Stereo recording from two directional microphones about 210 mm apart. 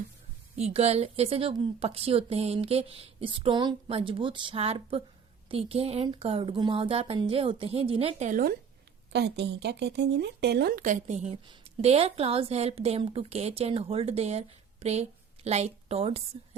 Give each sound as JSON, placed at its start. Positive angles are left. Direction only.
{"t": 0.5, "sound": "speech", "side_deg": -30}
{"t": 8.3, "sound": "speech", "side_deg": -45}
{"t": 9.1, "sound": "a woman's voice", "side_deg": -55}